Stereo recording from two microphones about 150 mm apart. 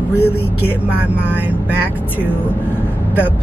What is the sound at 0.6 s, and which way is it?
Speech, 10° right (ahead or behind).